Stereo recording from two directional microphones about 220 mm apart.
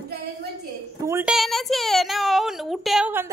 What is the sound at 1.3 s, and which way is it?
A woman's voice, centre (ahead or behind).